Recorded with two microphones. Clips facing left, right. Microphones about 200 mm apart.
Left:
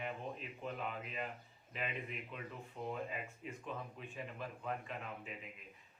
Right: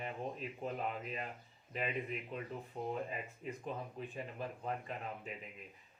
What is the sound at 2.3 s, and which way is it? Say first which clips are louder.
Speech: right 5 dB; 35° right (ahead or behind).